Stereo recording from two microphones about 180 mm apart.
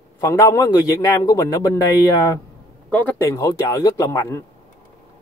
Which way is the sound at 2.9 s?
10° left (ahead or behind).